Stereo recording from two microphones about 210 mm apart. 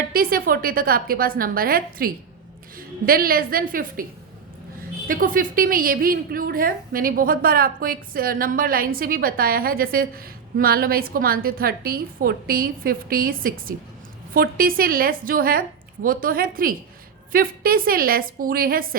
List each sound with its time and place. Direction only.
0.1 s a woman's voice: 45° right (ahead or behind)
5.0 s a woman's voice: 40° right (ahead or behind)